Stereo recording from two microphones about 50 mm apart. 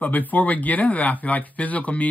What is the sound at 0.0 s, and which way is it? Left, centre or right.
Speech, left.